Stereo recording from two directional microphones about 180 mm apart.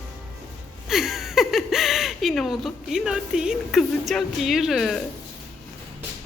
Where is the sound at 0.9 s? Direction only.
Centre (ahead or behind).